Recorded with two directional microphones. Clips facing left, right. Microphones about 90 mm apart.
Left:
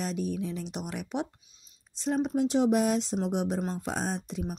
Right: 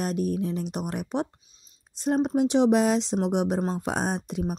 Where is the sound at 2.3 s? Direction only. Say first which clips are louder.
Right 4 dB; 75° right (ahead or behind).